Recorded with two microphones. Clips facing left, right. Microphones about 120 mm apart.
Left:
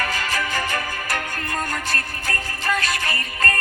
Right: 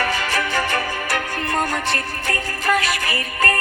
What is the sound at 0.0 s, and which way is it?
Music, 75° right (ahead or behind).